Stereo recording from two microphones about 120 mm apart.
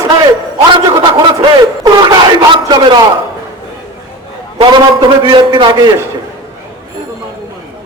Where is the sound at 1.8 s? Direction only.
35° right (ahead or behind).